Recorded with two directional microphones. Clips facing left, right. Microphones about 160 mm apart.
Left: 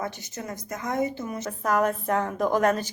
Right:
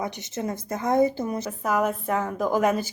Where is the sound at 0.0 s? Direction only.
20° right (ahead or behind).